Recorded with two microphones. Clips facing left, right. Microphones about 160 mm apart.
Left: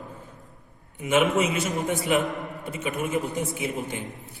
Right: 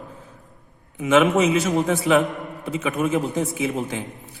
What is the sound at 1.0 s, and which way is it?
Speech, 90° right.